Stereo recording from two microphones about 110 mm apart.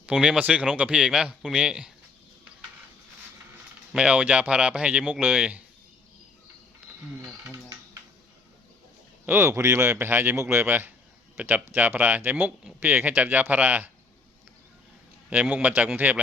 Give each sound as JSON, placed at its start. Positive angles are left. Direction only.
{"t": 0.0, "sound": "speech", "side_deg": -10}
{"t": 3.9, "sound": "speech", "side_deg": -10}
{"t": 9.2, "sound": "speech", "side_deg": -20}
{"t": 15.3, "sound": "speech", "side_deg": -10}